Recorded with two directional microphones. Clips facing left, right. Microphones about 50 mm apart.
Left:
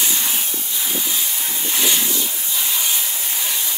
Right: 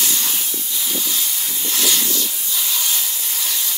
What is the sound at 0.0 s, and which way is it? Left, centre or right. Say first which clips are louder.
Hiss: left 1 dB; centre.